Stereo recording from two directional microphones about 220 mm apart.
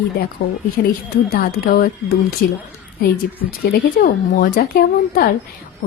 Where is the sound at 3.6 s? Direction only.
40° left (ahead or behind).